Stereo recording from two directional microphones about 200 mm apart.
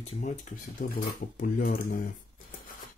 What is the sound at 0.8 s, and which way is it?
Speech, 40° left (ahead or behind).